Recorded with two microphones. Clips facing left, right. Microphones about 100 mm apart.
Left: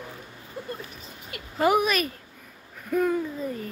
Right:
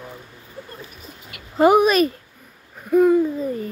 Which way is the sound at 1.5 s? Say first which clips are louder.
Right 8 dB; 25° right (ahead or behind).